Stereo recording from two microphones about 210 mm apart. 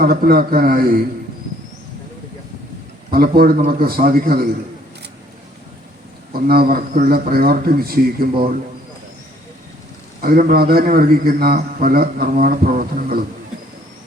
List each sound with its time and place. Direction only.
0.0 s a man's voice: 45° right (ahead or behind)
3.1 s a man's voice: 45° right (ahead or behind)
6.3 s a man's voice: 45° right (ahead or behind)
10.2 s a man's voice: 45° right (ahead or behind)